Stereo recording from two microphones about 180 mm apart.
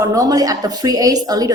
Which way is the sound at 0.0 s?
20° right (ahead or behind).